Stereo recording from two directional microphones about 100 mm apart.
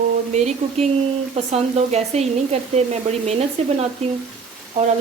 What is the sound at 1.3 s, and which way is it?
A woman's voice, 90° right.